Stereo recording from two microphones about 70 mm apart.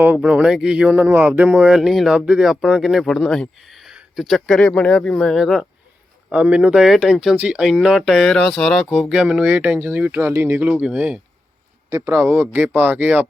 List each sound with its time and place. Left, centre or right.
0.2 s speech: centre
0.9 s speech: right
1.7 s speech: centre
2.4 s speech: centre
3.7 s a sound: centre
4.1 s speech: centre
4.7 s speech: centre
6.3 s speech: centre
6.8 s speech: centre
7.3 s speech: centre
7.6 s speech: centre
8.9 s speech: centre; by 10.7 s right
10.7 s speech: centre
12.1 s speech: right